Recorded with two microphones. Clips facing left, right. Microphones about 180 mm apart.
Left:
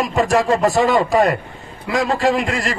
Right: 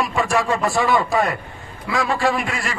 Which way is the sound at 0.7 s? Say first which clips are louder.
Left 3 dB; 20° left (ahead or behind).